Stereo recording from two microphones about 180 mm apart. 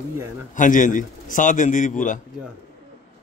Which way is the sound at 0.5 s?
45° left (ahead or behind).